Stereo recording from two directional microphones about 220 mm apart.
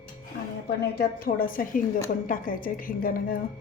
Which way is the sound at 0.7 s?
45° left (ahead or behind).